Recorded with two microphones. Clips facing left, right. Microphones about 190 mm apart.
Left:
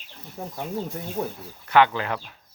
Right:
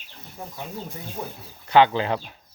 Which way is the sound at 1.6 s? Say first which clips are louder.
Right 2 dB; 30° right (ahead or behind).